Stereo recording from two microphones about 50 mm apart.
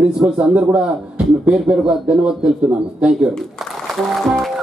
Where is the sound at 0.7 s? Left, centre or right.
Right.